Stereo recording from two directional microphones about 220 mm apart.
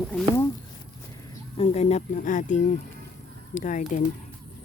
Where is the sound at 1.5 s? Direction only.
30° left (ahead or behind).